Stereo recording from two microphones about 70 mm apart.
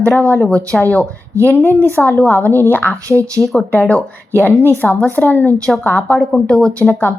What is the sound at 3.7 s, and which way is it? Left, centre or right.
A woman's voice, centre.